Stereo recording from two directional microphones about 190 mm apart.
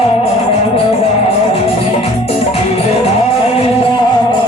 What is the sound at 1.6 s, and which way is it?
Music, 30° left (ahead or behind).